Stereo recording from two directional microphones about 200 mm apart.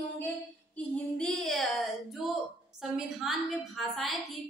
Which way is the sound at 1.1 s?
Centre (ahead or behind).